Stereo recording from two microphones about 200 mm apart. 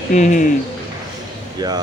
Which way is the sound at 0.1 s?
40° left (ahead or behind).